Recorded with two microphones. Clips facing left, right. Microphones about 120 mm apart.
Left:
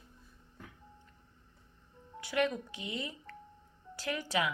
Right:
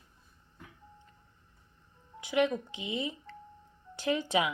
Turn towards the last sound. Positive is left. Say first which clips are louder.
# right 4 dB
turn(degrees=-20)  # may be behind; listen again after turning